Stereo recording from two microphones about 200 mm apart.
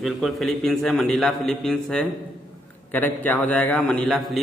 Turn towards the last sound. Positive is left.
turn(degrees=0)  # may be behind; listen again after turning